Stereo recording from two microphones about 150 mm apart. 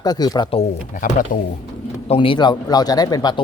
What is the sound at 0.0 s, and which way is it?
Speech, 25° left (ahead or behind).